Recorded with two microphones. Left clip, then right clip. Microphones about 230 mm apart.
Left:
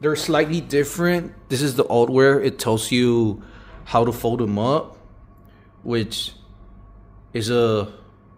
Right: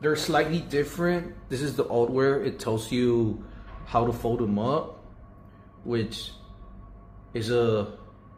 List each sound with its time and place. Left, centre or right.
0.0 s speech: left
5.9 s speech: left
7.3 s speech: left